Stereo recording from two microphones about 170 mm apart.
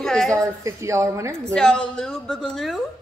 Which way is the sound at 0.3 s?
15° right (ahead or behind).